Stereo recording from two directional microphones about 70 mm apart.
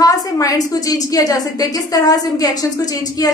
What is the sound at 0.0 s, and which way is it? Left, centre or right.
A woman's voice, left.